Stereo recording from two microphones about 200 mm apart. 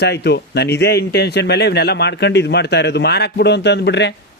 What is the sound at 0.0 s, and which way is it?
Speech, 55° left (ahead or behind).